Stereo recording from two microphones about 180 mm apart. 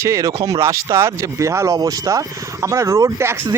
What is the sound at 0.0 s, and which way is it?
Speech, 20° right (ahead or behind).